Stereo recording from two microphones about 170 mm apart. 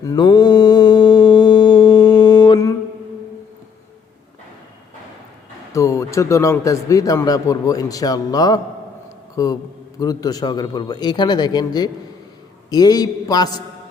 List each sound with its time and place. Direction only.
0.0 s mantra: 25° left (ahead or behind)
5.7 s a man's voice: 20° left (ahead or behind)